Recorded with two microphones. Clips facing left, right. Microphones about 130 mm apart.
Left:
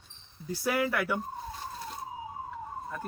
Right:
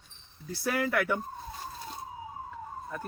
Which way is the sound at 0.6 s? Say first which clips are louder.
Even; 15° left (ahead or behind).